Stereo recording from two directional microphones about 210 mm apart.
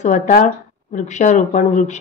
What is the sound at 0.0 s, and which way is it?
A woman's voice, 40° left (ahead or behind).